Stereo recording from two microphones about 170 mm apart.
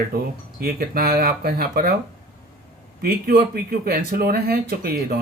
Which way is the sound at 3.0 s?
65° right (ahead or behind).